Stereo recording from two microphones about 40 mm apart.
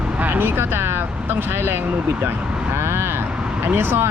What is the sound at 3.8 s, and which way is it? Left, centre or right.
Speech, right.